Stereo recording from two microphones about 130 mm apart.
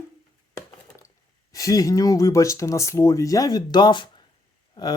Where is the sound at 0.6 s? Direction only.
25° left (ahead or behind).